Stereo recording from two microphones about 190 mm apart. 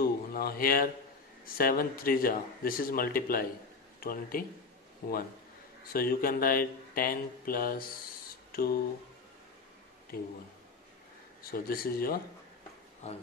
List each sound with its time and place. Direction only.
0.0 s a sound: 50° left (ahead or behind)
1.4 s speech: 50° left (ahead or behind)
5.9 s speech: 50° left (ahead or behind)
8.5 s a sound: 50° left (ahead or behind)
10.1 s speech: 50° left (ahead or behind)
11.5 s speech: 50° left (ahead or behind)
13.0 s speech: 35° left (ahead or behind)